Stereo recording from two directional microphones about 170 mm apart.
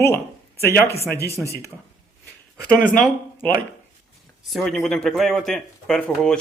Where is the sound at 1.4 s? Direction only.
Centre (ahead or behind).